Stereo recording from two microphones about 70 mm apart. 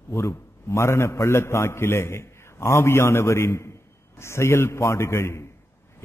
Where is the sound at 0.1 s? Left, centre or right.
Left.